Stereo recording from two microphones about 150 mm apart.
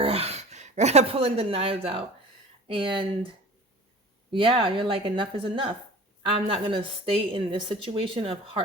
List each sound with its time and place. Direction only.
0.0 s a woman's voice: 40° right (ahead or behind)
4.3 s a woman's voice: 35° right (ahead or behind)